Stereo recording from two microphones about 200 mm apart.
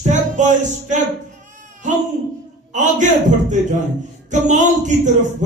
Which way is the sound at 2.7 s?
35° right (ahead or behind).